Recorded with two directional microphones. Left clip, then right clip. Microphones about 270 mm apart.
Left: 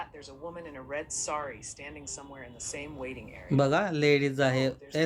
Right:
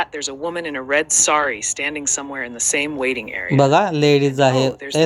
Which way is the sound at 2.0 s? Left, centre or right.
Right.